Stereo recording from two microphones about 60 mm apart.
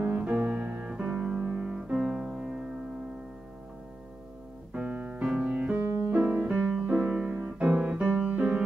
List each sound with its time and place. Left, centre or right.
0.0 s music: right
0.8 s music: centre
4.7 s piano: right
6.1 s music: right
7.3 s piano: right
7.7 s music: centre